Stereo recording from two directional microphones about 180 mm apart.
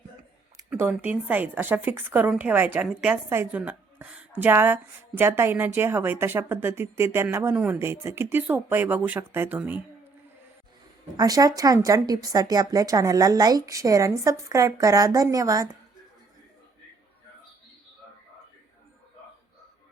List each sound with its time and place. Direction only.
0.5 s a woman's voice: 10° right (ahead or behind)
11.2 s speech: 20° right (ahead or behind)